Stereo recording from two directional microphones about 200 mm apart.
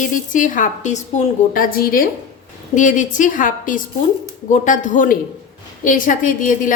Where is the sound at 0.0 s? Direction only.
40° left (ahead or behind).